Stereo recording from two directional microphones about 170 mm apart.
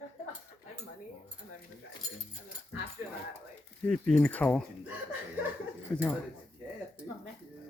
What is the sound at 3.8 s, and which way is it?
Speech, 5° left (ahead or behind).